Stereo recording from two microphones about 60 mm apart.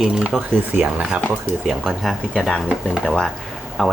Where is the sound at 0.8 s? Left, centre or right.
Right.